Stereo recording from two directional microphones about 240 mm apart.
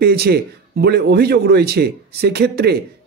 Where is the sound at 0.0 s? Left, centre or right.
Right.